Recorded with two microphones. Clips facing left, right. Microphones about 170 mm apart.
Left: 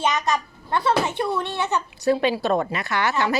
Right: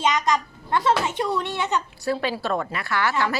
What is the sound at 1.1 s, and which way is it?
Speech, 20° right (ahead or behind).